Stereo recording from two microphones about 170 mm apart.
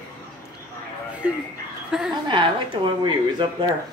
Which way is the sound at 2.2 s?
30° right (ahead or behind).